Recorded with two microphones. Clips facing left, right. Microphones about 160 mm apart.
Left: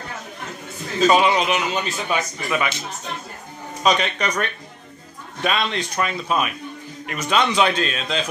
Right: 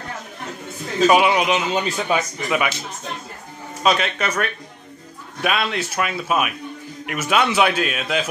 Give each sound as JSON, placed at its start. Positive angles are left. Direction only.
{"t": 1.0, "sound": "a man's voice", "side_deg": -10}
{"t": 1.7, "sound": "speech", "side_deg": -30}
{"t": 3.8, "sound": "a man's voice", "side_deg": -5}
{"t": 5.4, "sound": "a man's voice", "side_deg": -5}